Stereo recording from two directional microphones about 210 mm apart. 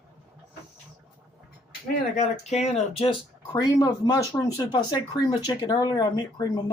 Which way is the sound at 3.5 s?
20° left (ahead or behind).